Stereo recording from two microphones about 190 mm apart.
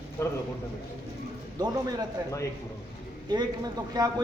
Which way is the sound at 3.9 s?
20° right (ahead or behind).